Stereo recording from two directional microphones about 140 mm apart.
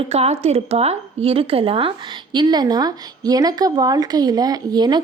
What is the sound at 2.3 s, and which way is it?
Speech, 30° right (ahead or behind).